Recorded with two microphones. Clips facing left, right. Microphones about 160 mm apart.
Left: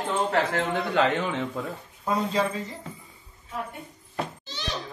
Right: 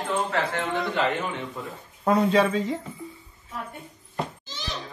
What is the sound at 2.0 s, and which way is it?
Speech, 65° right (ahead or behind).